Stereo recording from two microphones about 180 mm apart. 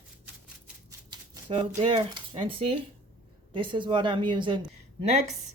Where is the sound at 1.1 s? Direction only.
25° right (ahead or behind).